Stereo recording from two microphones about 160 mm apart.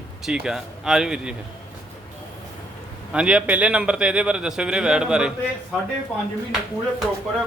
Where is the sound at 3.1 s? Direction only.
5° right (ahead or behind).